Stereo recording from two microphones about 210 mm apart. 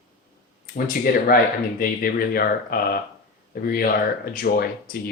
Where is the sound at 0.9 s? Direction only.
45° left (ahead or behind).